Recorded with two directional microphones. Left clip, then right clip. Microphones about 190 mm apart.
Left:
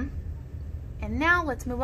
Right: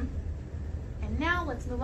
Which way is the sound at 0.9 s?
70° left (ahead or behind).